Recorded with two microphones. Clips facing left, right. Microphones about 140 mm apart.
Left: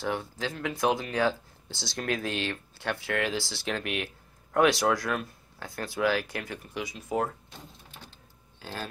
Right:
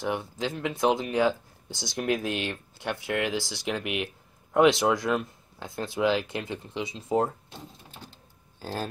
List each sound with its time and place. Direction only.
0.0 s speech: 15° right (ahead or behind)
8.5 s speech: 40° right (ahead or behind)